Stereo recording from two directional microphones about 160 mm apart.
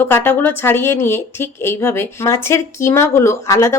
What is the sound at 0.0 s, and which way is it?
A woman's voice, 15° left (ahead or behind).